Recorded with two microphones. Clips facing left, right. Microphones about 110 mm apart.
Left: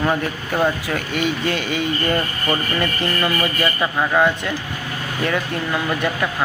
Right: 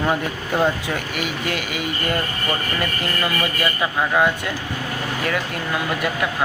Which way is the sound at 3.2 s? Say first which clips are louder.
Left 2 dB; centre (ahead or behind).